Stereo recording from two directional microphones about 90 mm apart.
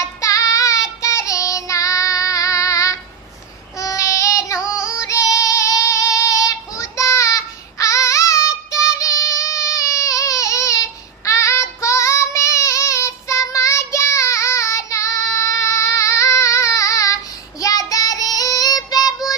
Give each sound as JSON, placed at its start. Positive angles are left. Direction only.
{"t": 0.0, "sound": "child singing", "side_deg": 35}